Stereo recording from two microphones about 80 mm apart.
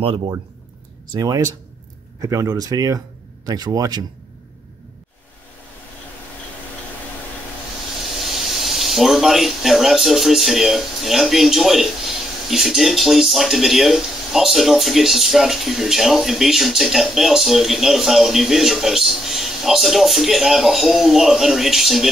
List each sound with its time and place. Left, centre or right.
1.1 s speech: right
8.2 s speech: centre